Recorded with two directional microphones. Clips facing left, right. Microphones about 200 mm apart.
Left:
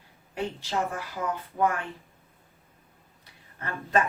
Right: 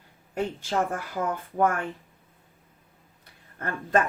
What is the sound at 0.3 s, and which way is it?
A woman's voice, 50° right (ahead or behind).